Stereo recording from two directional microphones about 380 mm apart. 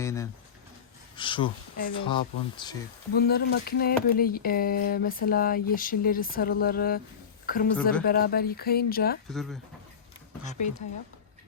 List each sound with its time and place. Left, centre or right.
0.0 s a sound: centre
1.1 s speech: centre
3.1 s a woman's voice: left
9.3 s speech: centre
10.4 s speech: centre